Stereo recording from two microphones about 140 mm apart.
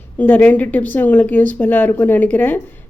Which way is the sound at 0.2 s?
10° left (ahead or behind).